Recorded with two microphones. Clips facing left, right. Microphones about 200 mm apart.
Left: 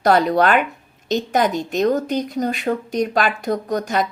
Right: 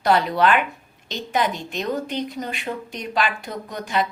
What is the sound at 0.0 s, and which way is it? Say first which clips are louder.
A woman's voice: left 3 dB; 40° left (ahead or behind).